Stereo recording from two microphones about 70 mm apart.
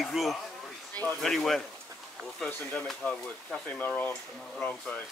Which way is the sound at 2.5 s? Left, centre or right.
Left.